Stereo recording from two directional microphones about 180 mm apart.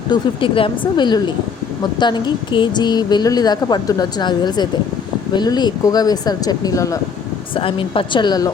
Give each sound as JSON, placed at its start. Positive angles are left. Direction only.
{"t": 0.1, "sound": "a woman's voice", "side_deg": 30}
{"t": 7.5, "sound": "a woman's voice", "side_deg": 30}